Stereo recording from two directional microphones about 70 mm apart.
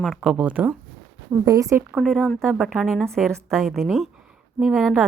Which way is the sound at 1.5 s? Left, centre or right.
Right.